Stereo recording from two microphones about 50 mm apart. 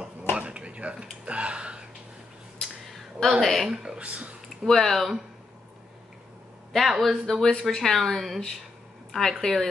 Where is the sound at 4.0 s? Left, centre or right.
Right.